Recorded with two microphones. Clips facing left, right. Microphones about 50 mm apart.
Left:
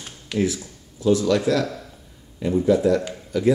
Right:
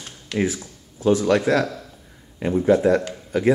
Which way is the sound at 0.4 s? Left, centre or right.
Right.